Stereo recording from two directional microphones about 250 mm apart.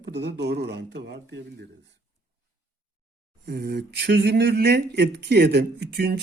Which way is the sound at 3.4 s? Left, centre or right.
Right.